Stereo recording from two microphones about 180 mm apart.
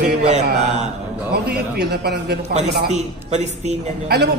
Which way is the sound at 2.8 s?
40° right (ahead or behind).